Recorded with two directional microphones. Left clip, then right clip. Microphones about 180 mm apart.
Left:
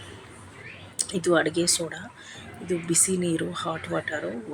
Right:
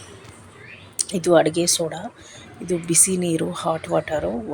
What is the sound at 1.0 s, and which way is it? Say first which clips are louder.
Speech: right 6 dB; 20° right (ahead or behind).